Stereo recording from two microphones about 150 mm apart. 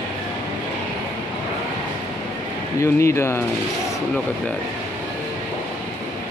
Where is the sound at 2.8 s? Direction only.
20° left (ahead or behind).